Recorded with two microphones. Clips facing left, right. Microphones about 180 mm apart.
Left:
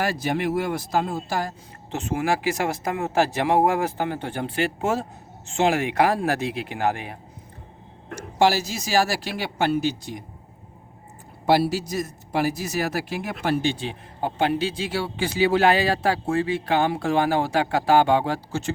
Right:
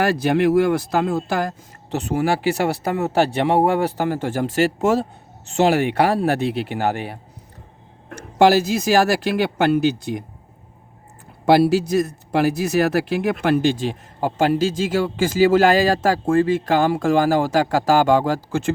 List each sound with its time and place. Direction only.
0.0 s speech: 65° right (ahead or behind)
1.9 s speech: 35° right (ahead or behind)
8.4 s speech: 55° right (ahead or behind)
11.4 s speech: 65° right (ahead or behind)
14.3 s speech: 45° right (ahead or behind)